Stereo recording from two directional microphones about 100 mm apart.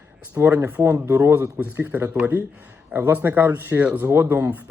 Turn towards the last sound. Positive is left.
turn(degrees=-15)  # may be behind; listen again after turning